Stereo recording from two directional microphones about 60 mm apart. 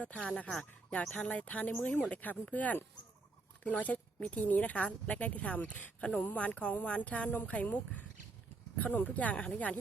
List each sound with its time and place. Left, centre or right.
0.2 s a woman's voice: centre